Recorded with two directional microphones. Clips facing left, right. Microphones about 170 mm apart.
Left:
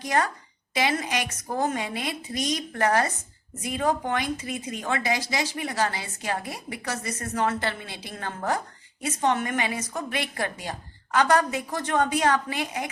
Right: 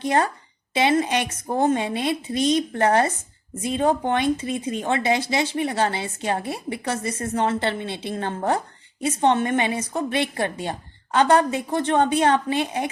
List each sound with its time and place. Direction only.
0.0 s speech: 25° right (ahead or behind)